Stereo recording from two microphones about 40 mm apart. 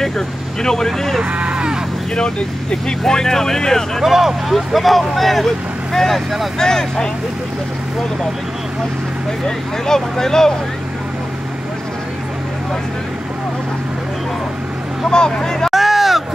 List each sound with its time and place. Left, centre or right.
0.6 s speech: centre
1.3 s cattle: right
2.1 s speech: centre
4.0 s speech: centre
9.8 s speech: centre
15.0 s speech: left
15.7 s a sound: centre